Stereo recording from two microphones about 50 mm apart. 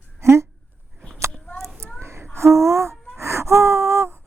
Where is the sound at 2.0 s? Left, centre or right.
Right.